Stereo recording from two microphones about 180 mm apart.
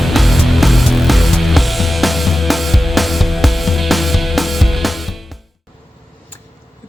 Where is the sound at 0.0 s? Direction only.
Centre (ahead or behind).